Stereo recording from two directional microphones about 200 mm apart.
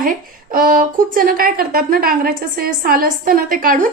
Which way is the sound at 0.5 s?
45° right (ahead or behind).